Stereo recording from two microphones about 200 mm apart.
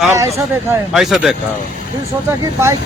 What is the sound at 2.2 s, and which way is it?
Speech, 10° right (ahead or behind).